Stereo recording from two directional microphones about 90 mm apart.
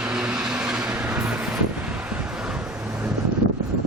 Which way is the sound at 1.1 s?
20° right (ahead or behind).